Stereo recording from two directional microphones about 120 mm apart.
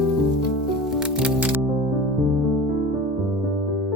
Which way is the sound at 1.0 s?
5° right (ahead or behind).